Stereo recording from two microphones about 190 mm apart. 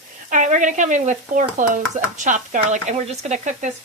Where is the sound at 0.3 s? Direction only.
40° right (ahead or behind).